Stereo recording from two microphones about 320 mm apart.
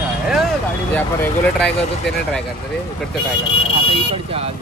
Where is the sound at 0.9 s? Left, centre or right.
Centre.